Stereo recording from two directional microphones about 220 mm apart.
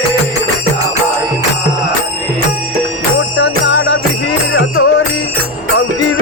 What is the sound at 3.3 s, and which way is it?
Music, 55° left (ahead or behind).